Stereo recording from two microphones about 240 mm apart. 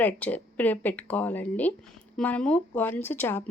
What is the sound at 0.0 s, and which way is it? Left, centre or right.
Speech, centre.